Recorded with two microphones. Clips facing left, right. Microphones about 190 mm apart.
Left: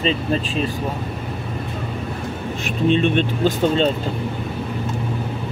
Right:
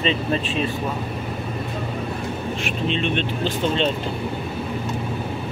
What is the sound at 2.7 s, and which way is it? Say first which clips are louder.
Speech: left 7 dB; 45° left (ahead or behind).